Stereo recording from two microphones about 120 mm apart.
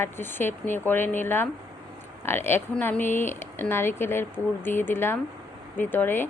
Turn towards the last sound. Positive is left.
turn(degrees=15)  # may be behind; listen again after turning